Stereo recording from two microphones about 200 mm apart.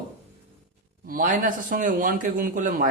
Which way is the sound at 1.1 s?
45° right (ahead or behind).